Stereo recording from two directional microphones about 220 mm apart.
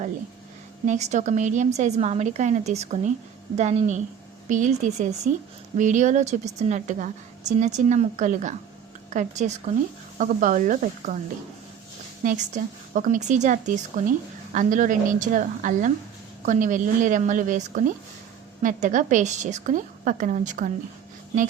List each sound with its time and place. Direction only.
0.9 s a woman's voice: 30° right (ahead or behind)
12.2 s a woman's voice: 35° right (ahead or behind)